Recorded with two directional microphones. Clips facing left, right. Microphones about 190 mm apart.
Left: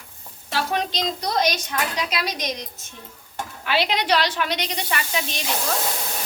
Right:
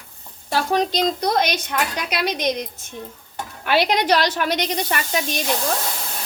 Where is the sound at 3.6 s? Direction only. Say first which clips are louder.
Right 4 dB; 50° right (ahead or behind).